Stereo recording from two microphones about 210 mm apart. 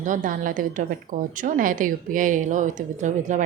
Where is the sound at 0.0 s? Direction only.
40° right (ahead or behind).